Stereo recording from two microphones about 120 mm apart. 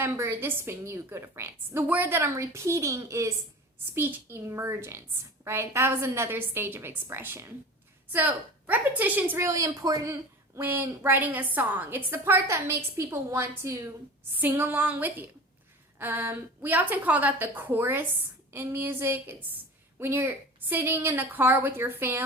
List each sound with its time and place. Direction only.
0.0 s a woman's voice: 20° right (ahead or behind)
9.5 s a woman's voice: 30° right (ahead or behind)